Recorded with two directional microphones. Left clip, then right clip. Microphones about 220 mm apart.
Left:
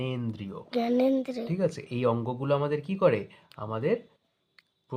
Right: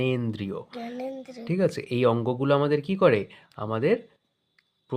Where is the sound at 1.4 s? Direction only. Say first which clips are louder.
Right 4 dB; 30° right (ahead or behind).